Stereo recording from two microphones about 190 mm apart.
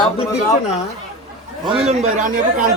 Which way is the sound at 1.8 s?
35° right (ahead or behind).